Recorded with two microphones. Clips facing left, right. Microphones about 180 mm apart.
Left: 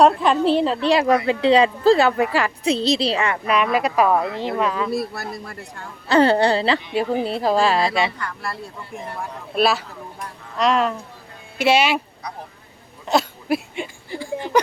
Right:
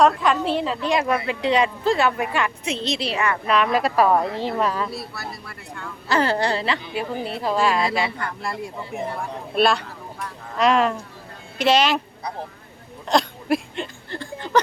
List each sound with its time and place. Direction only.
0.0 s speech: 30° left (ahead or behind)
3.4 s speech: 5° left (ahead or behind)
4.9 s speech: 50° left (ahead or behind); by 8.1 s 25° left (ahead or behind)
8.2 s speech: 20° right (ahead or behind)
9.6 s speech: 5° left (ahead or behind)
13.1 s a sound: 5° left (ahead or behind)